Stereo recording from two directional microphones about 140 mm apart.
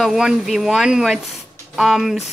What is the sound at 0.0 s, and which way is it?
Speech, 5° right (ahead or behind).